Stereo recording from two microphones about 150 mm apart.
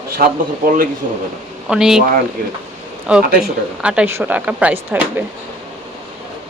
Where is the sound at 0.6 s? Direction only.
70° right (ahead or behind).